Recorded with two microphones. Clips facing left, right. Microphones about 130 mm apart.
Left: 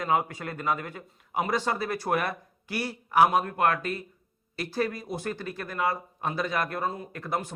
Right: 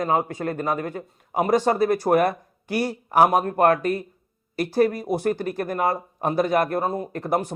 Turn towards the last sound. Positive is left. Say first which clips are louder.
# right 7 dB
turn(degrees=-40)  # may be behind; listen again after turning